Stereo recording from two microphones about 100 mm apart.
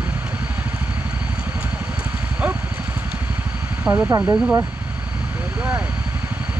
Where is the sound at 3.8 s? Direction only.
20° right (ahead or behind).